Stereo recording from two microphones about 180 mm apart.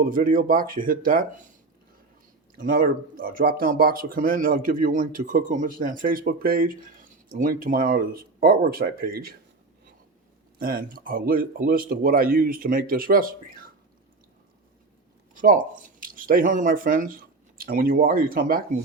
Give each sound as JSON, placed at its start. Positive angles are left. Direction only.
{"t": 0.0, "sound": "speech", "side_deg": -50}
{"t": 2.6, "sound": "speech", "side_deg": -50}
{"t": 10.6, "sound": "speech", "side_deg": -55}
{"t": 15.4, "sound": "speech", "side_deg": -45}